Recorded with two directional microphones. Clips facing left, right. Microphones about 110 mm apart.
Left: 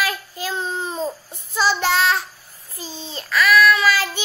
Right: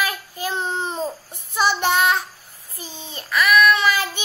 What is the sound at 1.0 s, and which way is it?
Child singing, 15° right (ahead or behind).